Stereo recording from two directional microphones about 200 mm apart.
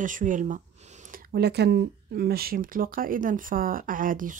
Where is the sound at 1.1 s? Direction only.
55° right (ahead or behind).